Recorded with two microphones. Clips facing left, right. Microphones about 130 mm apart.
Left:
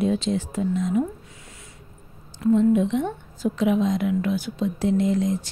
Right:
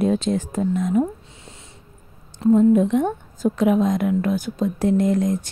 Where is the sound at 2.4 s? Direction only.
40° right (ahead or behind).